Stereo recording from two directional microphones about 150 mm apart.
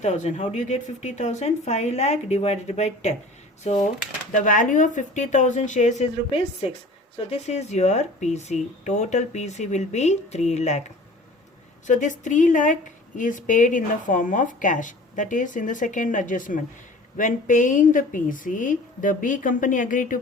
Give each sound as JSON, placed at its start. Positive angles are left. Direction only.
{"t": 0.0, "sound": "speech", "side_deg": 50}
{"t": 7.3, "sound": "speech", "side_deg": 45}
{"t": 11.9, "sound": "speech", "side_deg": 55}